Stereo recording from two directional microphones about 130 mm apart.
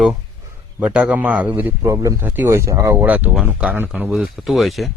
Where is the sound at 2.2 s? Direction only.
15° right (ahead or behind); by 4.9 s centre (ahead or behind).